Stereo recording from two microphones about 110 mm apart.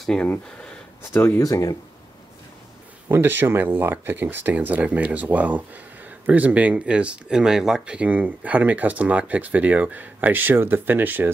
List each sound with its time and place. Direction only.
0.0 s speech: 5° left (ahead or behind)
1.1 s speech: 20° left (ahead or behind)
1.4 s speech: 35° left (ahead or behind)
3.1 s speech: 20° right (ahead or behind)